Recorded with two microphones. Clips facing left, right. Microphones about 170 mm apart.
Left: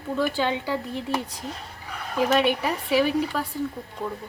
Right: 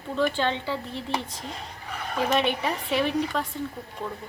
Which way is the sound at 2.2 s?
5° left (ahead or behind).